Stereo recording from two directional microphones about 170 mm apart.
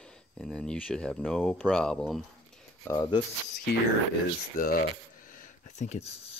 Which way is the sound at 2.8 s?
15° left (ahead or behind).